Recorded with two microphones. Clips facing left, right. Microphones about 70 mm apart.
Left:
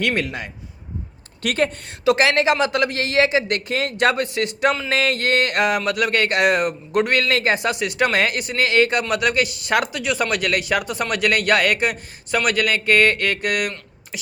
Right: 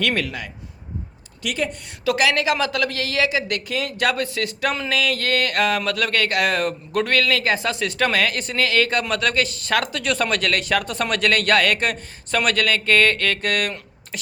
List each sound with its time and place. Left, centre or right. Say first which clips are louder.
0.2 s speech: left 1 dB; left
1.4 s speech: left 4 dB; left
2.0 s speech: left 3 dB; left
10.0 s speech: even; centre